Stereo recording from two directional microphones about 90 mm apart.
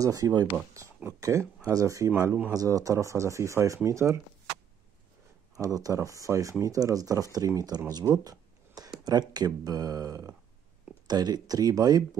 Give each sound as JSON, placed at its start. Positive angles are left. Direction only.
{"t": 0.0, "sound": "speech", "side_deg": -40}
{"t": 2.0, "sound": "speech", "side_deg": -25}
{"t": 2.5, "sound": "speech", "side_deg": -40}
{"t": 5.6, "sound": "speech", "side_deg": -40}